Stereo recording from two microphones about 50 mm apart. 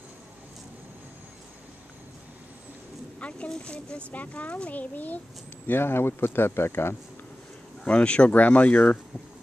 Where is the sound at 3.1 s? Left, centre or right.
Left.